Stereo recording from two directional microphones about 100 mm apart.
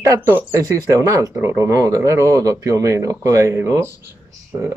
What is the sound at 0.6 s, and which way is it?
Speech, 35° right (ahead or behind).